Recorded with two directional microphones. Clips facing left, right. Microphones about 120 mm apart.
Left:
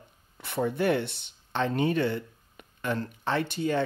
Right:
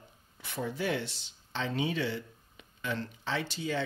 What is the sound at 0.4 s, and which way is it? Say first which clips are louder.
Speech: left 7 dB; 60° left (ahead or behind).